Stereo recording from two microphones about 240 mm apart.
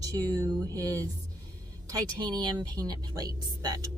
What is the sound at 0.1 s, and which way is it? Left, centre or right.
Speech, centre.